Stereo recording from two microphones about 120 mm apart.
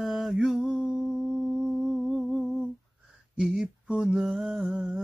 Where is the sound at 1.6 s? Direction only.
5° right (ahead or behind).